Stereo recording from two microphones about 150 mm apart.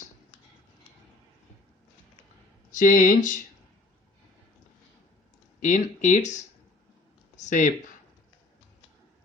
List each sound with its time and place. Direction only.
2.7 s speech: 60° left (ahead or behind)
5.5 s speech: 55° left (ahead or behind)
7.3 s a sound: 55° left (ahead or behind)